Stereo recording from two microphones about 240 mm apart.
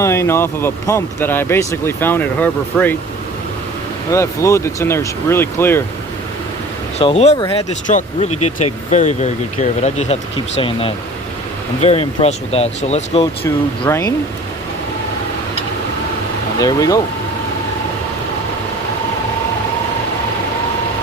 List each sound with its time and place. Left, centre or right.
0.0 s speech: centre
4.1 s speech: centre
7.0 s speech: left
8.3 s speech: left
8.9 s speech: left
13.4 s speech: centre
16.6 s speech: centre